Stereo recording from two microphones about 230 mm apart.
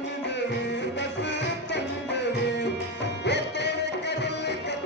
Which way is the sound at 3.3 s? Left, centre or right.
Left.